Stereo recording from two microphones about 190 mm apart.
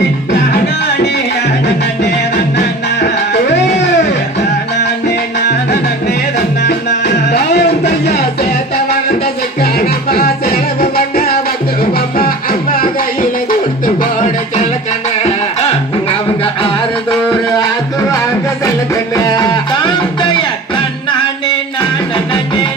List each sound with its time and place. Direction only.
3.7 s music: 65° left (ahead or behind)
6.1 s music: 60° left (ahead or behind)
19.1 s music: 20° left (ahead or behind)